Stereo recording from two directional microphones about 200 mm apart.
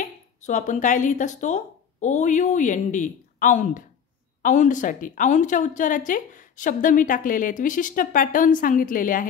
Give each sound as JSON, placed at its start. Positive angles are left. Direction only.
{"t": 0.0, "sound": "a woman's voice", "side_deg": 35}